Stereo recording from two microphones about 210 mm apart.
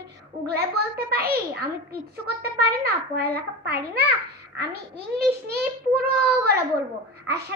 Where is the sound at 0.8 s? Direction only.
50° right (ahead or behind).